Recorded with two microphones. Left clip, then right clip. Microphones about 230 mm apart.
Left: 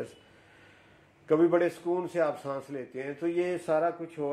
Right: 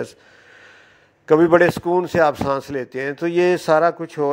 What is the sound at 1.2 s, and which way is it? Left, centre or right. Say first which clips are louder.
A man's voice: right 11 dB; right.